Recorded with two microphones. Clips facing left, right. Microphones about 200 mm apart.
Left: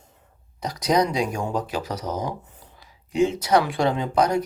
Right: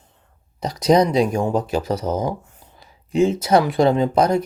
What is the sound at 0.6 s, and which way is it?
Speech, 25° right (ahead or behind).